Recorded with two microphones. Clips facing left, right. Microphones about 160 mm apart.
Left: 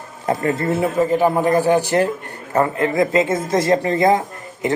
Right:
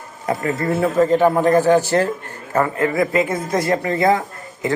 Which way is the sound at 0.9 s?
10° left (ahead or behind).